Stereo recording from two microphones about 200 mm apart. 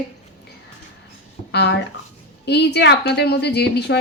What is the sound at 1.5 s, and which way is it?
A woman's voice, 60° left (ahead or behind).